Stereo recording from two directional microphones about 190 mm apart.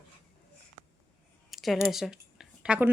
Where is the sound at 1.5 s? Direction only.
Centre (ahead or behind).